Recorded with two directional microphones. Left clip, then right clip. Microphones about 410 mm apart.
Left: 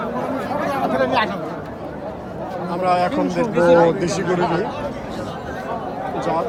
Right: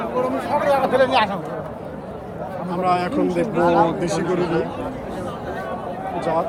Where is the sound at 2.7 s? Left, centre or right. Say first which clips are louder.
Left 2 dB; centre.